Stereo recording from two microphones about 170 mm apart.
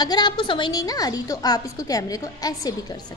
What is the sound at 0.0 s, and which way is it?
A woman's voice, 25° left (ahead or behind).